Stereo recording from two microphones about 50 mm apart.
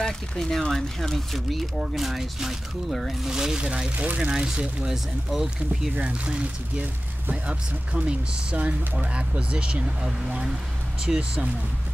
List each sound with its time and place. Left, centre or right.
0.0 s speech: centre
3.3 s speech: centre
3.9 s speech: right
4.2 s speech: right
4.8 s speech: centre
5.9 s speech: right